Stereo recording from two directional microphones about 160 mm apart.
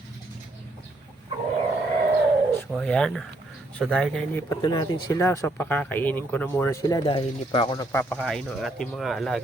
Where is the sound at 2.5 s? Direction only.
5° left (ahead or behind).